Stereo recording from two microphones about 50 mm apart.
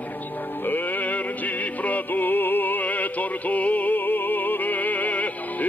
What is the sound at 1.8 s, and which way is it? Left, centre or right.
Music, left.